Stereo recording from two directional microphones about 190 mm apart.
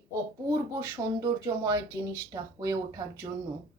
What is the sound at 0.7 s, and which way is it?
Speech, 15° right (ahead or behind).